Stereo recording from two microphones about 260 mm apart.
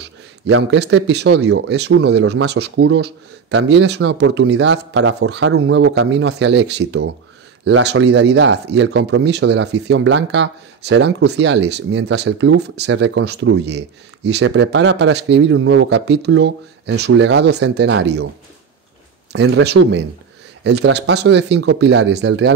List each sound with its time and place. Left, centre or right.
0.5 s speech: right
19.3 s speech: right